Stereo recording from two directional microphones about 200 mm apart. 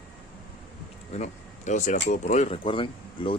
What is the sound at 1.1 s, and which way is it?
Speech, 35° left (ahead or behind).